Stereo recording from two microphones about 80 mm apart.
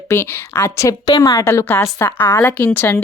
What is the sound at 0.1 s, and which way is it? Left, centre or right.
Speech, left.